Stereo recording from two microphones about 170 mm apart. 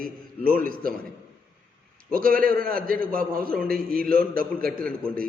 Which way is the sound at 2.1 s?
55° right (ahead or behind).